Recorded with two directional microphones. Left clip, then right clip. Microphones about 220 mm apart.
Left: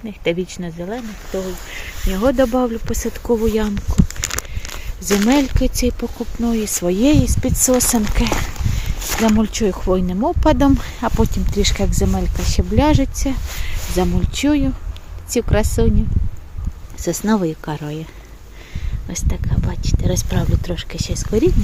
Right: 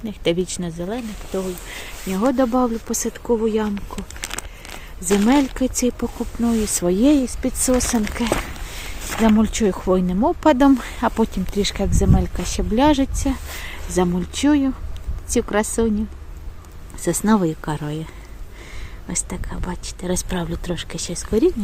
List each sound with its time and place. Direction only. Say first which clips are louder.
0.0 s speech: even; 10° right (ahead or behind)
3.1 s speech: left 2 dB; 15° left (ahead or behind)
3.9 s a sound: left 7 dB; 30° left (ahead or behind)
5.2 s speech: left 2 dB; 10° left (ahead or behind)
9.2 s speech: even; centre (ahead or behind)
17.0 s speech: even; 5° right (ahead or behind)